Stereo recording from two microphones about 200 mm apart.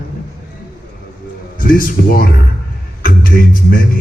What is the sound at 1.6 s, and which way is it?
Speech, 45° left (ahead or behind).